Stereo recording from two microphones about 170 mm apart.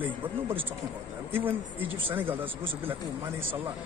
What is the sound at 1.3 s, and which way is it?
Speech, 10° right (ahead or behind).